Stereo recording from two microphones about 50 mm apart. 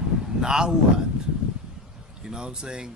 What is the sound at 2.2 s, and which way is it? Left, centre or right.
Speech, centre.